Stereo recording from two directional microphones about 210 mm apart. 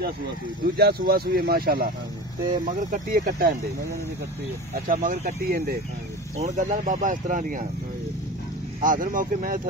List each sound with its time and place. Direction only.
0.7 s speech: 50° right (ahead or behind)
4.8 s speech: 40° right (ahead or behind)
8.8 s speech: 40° right (ahead or behind)